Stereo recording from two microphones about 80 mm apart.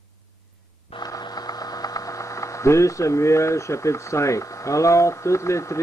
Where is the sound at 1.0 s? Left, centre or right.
Left.